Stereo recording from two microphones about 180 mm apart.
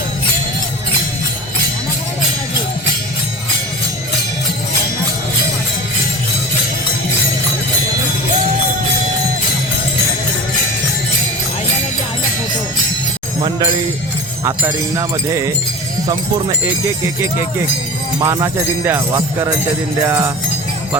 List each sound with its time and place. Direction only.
14.4 s jingle bell: 15° right (ahead or behind)
18.2 s jingle bell: 20° right (ahead or behind)